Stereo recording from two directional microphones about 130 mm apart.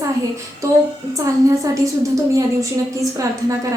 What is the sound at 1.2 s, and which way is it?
A woman's voice, 25° right (ahead or behind).